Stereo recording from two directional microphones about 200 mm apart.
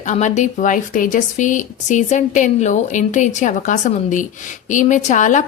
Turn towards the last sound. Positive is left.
turn(degrees=40)  # may be behind; listen again after turning